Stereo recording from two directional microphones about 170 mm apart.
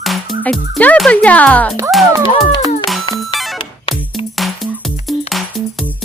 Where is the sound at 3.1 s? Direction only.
Centre (ahead or behind).